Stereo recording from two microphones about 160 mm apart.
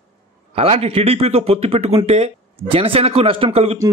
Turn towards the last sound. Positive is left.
turn(degrees=-35)  # may be behind; listen again after turning